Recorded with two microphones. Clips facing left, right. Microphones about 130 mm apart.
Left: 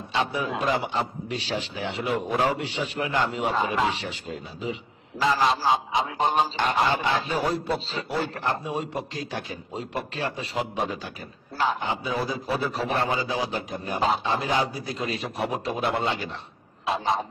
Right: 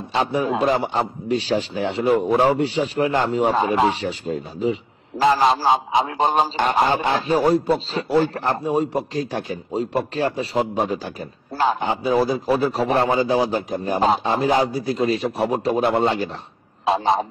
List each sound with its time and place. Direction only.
0.1 s a man's voice: 40° right (ahead or behind)